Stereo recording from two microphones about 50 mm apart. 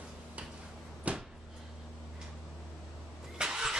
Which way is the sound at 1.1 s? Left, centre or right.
Right.